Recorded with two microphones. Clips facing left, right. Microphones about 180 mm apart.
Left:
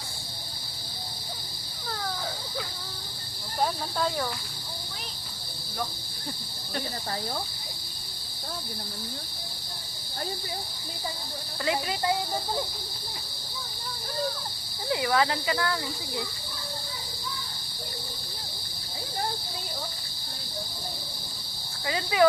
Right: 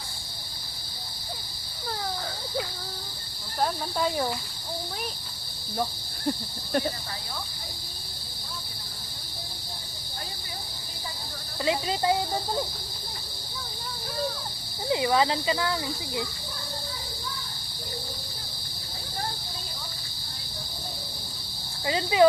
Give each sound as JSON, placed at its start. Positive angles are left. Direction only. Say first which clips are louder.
{"t": 11.6, "sound": "speech", "louder": "right 2 dB", "side_deg": -20}
{"t": 14.8, "sound": "speech", "louder": "right 2 dB", "side_deg": -20}
{"t": 21.8, "sound": "speech", "louder": "right 2 dB", "side_deg": -25}